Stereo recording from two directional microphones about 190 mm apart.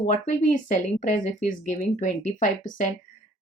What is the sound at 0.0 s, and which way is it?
Speech, 40° left (ahead or behind).